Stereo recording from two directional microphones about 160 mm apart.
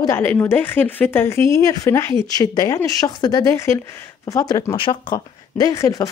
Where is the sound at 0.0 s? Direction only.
15° left (ahead or behind).